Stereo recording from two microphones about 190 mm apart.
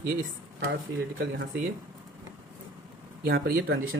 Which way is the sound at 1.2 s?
55° right (ahead or behind).